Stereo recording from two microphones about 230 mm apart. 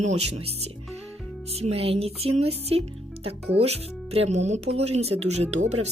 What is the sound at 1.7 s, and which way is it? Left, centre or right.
Speech, right.